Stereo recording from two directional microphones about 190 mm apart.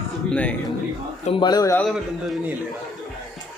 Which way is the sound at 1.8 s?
Centre (ahead or behind).